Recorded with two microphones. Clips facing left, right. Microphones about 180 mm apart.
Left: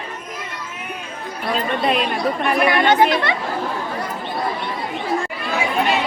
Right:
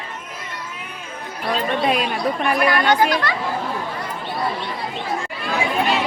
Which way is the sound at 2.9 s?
25° left (ahead or behind).